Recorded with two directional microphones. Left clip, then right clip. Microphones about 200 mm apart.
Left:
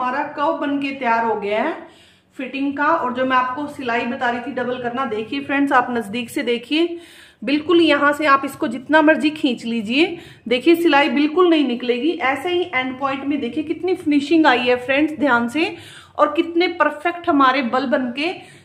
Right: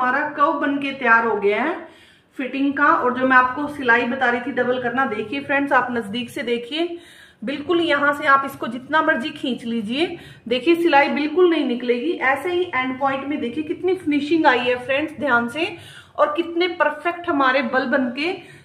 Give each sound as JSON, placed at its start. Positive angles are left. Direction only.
{"t": 0.0, "sound": "a woman's voice", "side_deg": 20}
{"t": 5.5, "sound": "a woman's voice", "side_deg": 40}
{"t": 13.8, "sound": "a woman's voice", "side_deg": 40}